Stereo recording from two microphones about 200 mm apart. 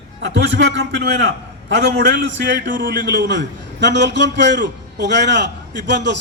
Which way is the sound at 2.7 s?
50° right (ahead or behind).